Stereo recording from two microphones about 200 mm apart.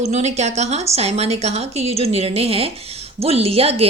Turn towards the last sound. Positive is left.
turn(degrees=-30)  # may be behind; listen again after turning